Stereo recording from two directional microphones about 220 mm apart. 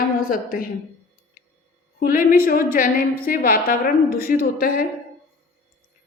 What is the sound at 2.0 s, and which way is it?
A woman's voice, 40° left (ahead or behind).